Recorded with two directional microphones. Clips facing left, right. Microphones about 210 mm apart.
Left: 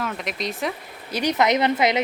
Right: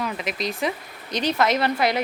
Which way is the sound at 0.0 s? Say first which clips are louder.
Right 1 dB; centre (ahead or behind).